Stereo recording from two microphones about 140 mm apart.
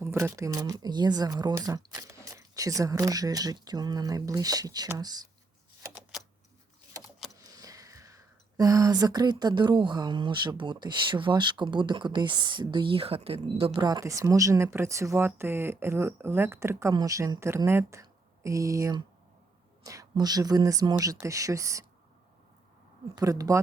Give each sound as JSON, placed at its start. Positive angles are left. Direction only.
{"t": 0.0, "sound": "speech", "side_deg": -20}
{"t": 7.3, "sound": "speech", "side_deg": -25}
{"t": 13.7, "sound": "speech", "side_deg": -30}
{"t": 23.1, "sound": "speech", "side_deg": -25}